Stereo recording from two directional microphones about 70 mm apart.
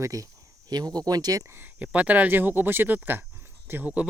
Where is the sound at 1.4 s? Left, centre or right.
Right.